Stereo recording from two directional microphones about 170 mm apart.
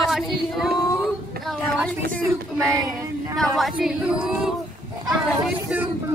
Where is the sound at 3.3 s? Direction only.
Centre (ahead or behind).